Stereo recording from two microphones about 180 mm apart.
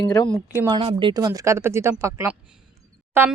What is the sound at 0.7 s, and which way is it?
Speech, 30° right (ahead or behind).